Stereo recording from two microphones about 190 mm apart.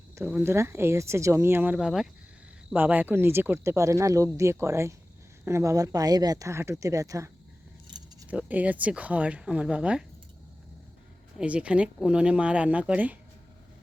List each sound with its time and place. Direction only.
0.2 s speech: 10° right (ahead or behind)
8.3 s speech: 10° right (ahead or behind)
11.3 s speech: 5° right (ahead or behind)